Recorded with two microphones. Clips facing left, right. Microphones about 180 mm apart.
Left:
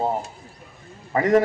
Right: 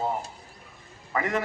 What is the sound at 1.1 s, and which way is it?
Speech, 40° left (ahead or behind).